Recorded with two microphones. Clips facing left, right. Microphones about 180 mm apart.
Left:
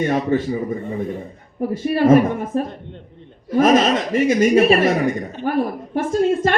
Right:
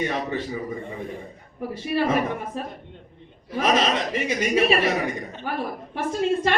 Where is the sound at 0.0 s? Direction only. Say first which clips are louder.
Left 8 dB; 45° left (ahead or behind).